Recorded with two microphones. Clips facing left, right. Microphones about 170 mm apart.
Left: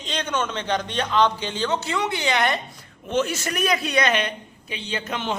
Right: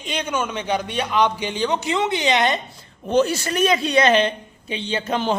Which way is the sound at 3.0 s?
35° right (ahead or behind).